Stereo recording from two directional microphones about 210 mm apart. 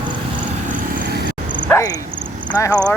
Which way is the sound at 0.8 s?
50° right (ahead or behind).